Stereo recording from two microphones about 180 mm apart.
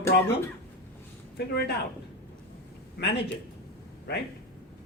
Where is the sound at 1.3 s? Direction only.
65° left (ahead or behind).